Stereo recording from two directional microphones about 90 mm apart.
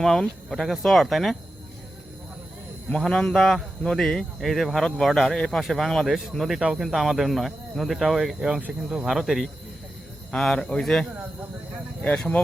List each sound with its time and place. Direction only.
0.0 s speech: 5° left (ahead or behind)
2.9 s speech: 10° left (ahead or behind)
10.3 s speech: 10° left (ahead or behind)
12.0 s speech: 10° left (ahead or behind)